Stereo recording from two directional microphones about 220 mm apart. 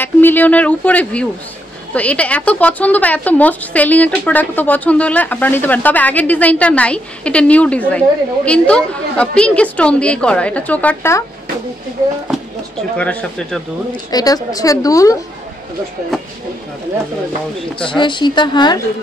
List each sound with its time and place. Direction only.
0.0 s a woman's voice: 10° left (ahead or behind)
12.9 s a woman's voice: 5° left (ahead or behind)
14.1 s a woman's voice: 15° left (ahead or behind)
17.7 s speech: 20° left (ahead or behind)